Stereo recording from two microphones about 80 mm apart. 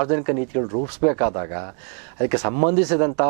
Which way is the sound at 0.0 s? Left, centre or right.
Centre.